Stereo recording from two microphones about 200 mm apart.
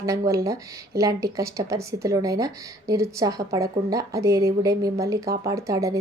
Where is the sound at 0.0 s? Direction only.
15° right (ahead or behind).